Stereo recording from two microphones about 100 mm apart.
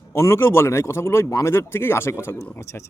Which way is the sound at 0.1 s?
30° left (ahead or behind).